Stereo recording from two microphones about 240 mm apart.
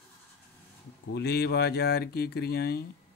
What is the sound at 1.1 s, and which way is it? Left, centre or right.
Speech, left.